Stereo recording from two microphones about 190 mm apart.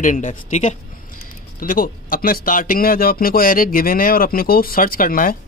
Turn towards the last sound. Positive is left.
turn(degrees=45)  # may be behind; listen again after turning